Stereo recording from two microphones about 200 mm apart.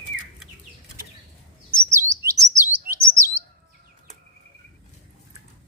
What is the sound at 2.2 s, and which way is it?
Chirp, 15° right (ahead or behind).